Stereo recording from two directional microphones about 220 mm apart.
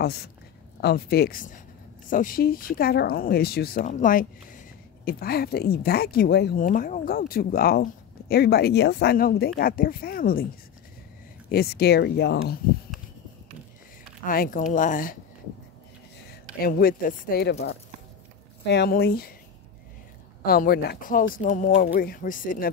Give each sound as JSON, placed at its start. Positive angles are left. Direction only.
{"t": 0.7, "sound": "speech", "side_deg": 45}
{"t": 11.4, "sound": "speech", "side_deg": 45}
{"t": 14.2, "sound": "speech", "side_deg": 40}
{"t": 16.6, "sound": "speech", "side_deg": 40}
{"t": 18.7, "sound": "speech", "side_deg": 50}
{"t": 20.4, "sound": "speech", "side_deg": 45}